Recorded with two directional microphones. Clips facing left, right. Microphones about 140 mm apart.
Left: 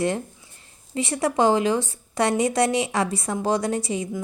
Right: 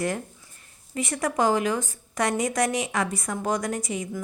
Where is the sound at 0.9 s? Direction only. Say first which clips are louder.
Left 3 dB; 30° left (ahead or behind).